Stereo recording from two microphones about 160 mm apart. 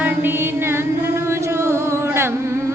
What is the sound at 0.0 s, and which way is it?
Music, 10° right (ahead or behind).